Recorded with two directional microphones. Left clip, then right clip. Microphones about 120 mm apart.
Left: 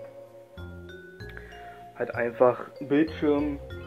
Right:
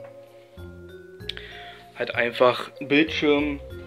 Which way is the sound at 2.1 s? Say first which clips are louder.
Right 3 dB; 25° right (ahead or behind).